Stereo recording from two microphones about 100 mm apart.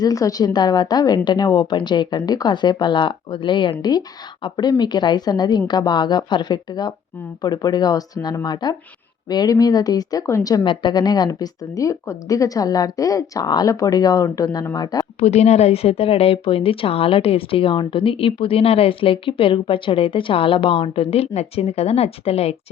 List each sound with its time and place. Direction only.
0.0 s a woman's voice: 35° left (ahead or behind)
15.2 s a woman's voice: 90° left